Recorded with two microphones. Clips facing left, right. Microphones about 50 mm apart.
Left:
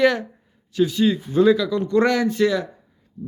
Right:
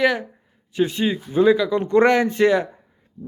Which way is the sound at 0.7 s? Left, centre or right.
Right.